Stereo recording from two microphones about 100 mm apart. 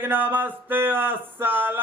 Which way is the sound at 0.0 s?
20° right (ahead or behind).